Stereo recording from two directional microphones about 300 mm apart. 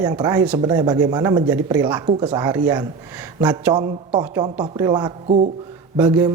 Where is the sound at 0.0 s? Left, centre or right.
Centre.